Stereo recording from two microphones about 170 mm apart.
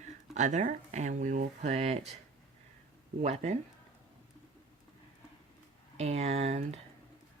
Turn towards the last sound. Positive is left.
turn(degrees=-40)  # may be behind; listen again after turning